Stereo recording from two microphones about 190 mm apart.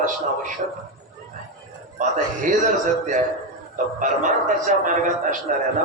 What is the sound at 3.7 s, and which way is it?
A man's voice, 40° right (ahead or behind).